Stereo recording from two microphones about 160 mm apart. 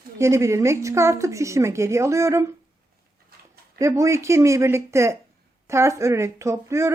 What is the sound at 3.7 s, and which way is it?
Speech, 20° right (ahead or behind).